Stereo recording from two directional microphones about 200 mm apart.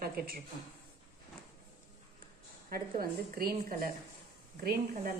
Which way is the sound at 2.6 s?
50° right (ahead or behind).